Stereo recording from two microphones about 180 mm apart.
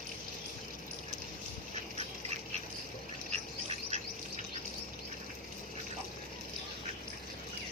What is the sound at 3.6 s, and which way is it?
Bird, 35° right (ahead or behind).